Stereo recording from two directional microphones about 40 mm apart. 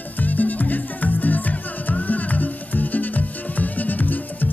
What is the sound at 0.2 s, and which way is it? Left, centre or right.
Music, left.